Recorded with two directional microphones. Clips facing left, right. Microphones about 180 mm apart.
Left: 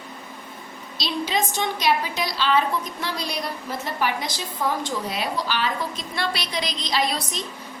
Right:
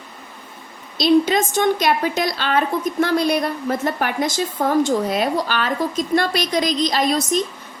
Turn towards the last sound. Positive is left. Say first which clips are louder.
# right 7 dB
turn(degrees=-45)  # may be behind; listen again after turning